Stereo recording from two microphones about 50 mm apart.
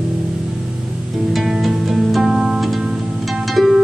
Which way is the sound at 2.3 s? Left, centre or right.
Centre.